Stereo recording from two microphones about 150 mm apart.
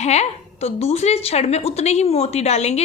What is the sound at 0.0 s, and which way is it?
A woman's voice, 45° left (ahead or behind).